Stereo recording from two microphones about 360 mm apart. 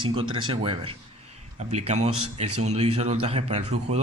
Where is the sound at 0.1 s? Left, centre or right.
Centre.